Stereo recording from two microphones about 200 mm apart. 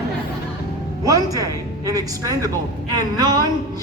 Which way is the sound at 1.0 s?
15° right (ahead or behind).